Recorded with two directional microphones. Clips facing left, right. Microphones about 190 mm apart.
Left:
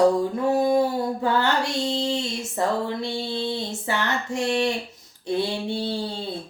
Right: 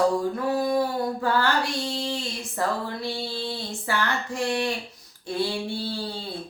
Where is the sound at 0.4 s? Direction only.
25° left (ahead or behind).